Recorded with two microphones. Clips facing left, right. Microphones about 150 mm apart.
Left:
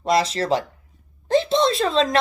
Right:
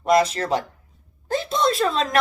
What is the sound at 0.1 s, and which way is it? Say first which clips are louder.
Speech: right 1 dB; 30° left (ahead or behind).